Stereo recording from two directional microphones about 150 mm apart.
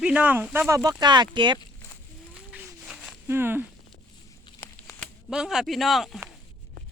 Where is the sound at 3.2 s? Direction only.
15° right (ahead or behind).